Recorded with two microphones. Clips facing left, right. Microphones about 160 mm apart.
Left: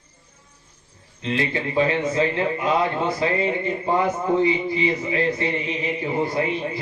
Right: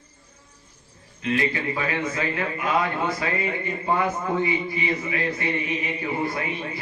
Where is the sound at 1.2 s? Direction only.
30° left (ahead or behind).